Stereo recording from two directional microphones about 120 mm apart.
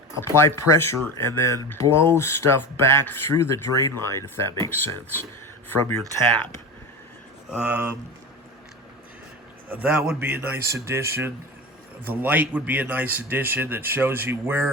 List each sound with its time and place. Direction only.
0.2 s speech: 20° left (ahead or behind)
7.5 s a man's voice: 10° right (ahead or behind)
9.6 s a man's voice: 10° right (ahead or behind)